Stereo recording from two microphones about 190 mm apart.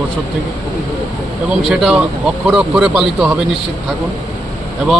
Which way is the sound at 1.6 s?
Centre (ahead or behind).